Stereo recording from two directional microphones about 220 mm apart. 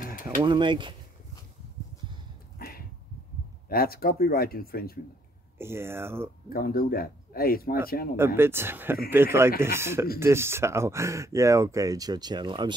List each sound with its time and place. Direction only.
0.0 s pigeon: 40° left (ahead or behind)
0.4 s speech: 20° right (ahead or behind)
3.6 s speech: 45° left (ahead or behind)
5.6 s speech: 10° right (ahead or behind)
6.5 s speech: 40° left (ahead or behind)
8.4 s speech: 10° right (ahead or behind)